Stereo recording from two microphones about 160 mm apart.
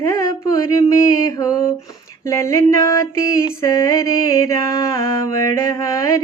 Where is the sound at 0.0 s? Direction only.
20° left (ahead or behind).